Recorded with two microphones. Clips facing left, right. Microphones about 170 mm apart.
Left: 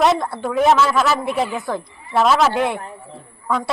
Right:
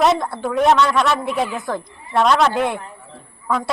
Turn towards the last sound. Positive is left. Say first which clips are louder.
# even
turn(degrees=0)  # may be behind; listen again after turning